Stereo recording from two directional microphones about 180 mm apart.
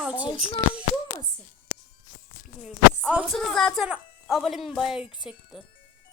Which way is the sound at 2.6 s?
5° right (ahead or behind).